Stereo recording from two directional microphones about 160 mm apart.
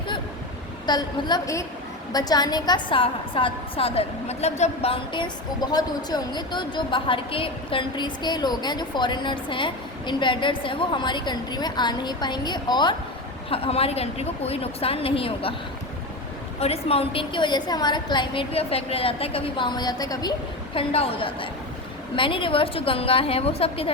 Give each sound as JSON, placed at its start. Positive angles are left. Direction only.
{"t": 0.9, "sound": "a woman's voice", "side_deg": 25}
{"t": 13.5, "sound": "a woman's voice", "side_deg": 40}
{"t": 16.6, "sound": "a woman's voice", "side_deg": 40}
{"t": 20.7, "sound": "a woman's voice", "side_deg": 35}